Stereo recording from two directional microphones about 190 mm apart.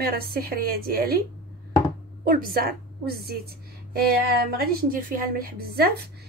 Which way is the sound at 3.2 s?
55° right (ahead or behind).